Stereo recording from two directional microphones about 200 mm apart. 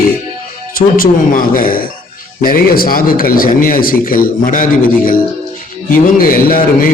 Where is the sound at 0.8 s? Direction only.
45° left (ahead or behind).